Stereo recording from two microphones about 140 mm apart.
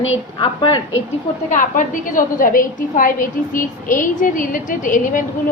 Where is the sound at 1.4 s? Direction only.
70° left (ahead or behind).